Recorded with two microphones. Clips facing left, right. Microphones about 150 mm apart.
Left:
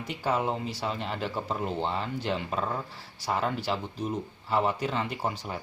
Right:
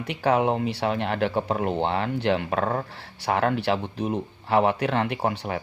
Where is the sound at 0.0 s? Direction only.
65° right (ahead or behind).